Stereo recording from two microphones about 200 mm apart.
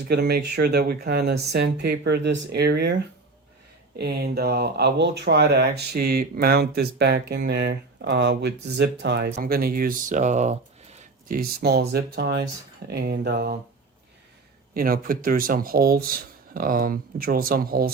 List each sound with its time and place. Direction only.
0.1 s speech: 55° right (ahead or behind)
9.3 s speech: 45° right (ahead or behind)
11.3 s speech: 55° right (ahead or behind)
14.7 s speech: 45° right (ahead or behind)